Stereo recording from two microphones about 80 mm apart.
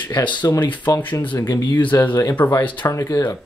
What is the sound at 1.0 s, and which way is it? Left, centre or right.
Speech, left.